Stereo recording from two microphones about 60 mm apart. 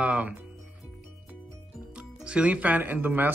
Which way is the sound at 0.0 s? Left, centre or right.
Right.